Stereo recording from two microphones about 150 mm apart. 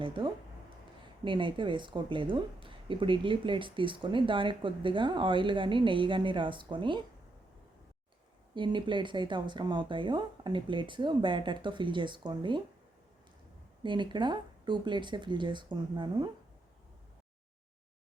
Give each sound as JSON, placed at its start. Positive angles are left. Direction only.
{"t": 0.0, "sound": "speech", "side_deg": -35}
{"t": 8.5, "sound": "speech", "side_deg": -30}
{"t": 13.8, "sound": "speech", "side_deg": -30}